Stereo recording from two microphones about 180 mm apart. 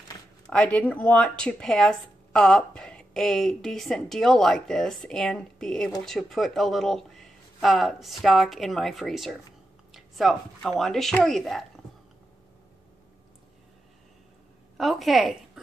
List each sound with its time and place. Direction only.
0.5 s speech: 5° left (ahead or behind)
14.8 s a woman's voice: centre (ahead or behind)